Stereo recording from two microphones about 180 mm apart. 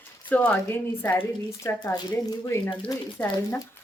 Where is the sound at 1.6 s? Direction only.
20° left (ahead or behind).